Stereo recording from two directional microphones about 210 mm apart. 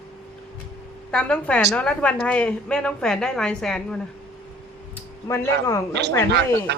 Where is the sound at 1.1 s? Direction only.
5° left (ahead or behind).